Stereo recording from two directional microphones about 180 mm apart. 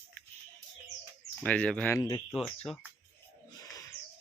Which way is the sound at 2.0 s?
20° left (ahead or behind).